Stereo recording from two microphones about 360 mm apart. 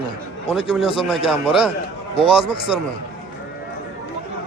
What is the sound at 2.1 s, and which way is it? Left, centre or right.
Speech, centre.